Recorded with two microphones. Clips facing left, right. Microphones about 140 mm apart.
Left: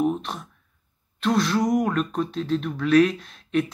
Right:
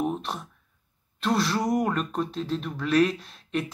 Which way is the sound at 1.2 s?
5° right (ahead or behind).